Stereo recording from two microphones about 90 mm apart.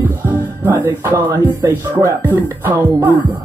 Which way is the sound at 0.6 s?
25° right (ahead or behind).